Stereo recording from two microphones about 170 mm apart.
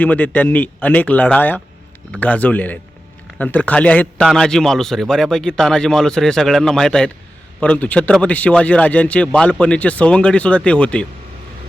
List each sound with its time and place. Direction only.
0.0 s a man's voice: 10° left (ahead or behind)